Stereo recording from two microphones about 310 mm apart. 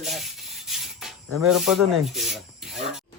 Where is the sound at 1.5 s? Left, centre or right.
Centre.